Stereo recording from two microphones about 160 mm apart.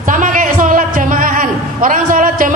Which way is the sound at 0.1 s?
55° right (ahead or behind).